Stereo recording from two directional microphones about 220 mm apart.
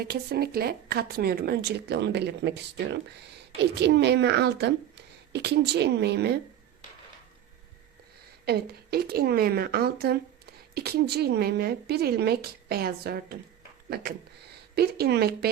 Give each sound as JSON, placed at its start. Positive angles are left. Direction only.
{"t": 0.0, "sound": "speech", "side_deg": -45}
{"t": 8.4, "sound": "speech", "side_deg": -45}
{"t": 14.8, "sound": "speech", "side_deg": -45}